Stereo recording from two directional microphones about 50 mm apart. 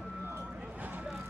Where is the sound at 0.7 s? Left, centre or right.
Right.